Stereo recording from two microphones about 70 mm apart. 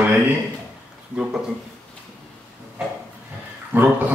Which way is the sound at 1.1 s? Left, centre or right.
Centre.